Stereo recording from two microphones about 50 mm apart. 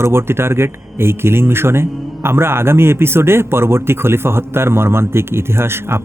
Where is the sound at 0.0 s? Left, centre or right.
Right.